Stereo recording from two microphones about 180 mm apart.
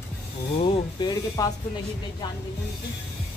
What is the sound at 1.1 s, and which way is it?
Speech, 20° left (ahead or behind).